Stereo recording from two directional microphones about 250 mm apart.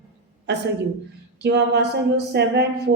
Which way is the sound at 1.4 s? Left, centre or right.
Right.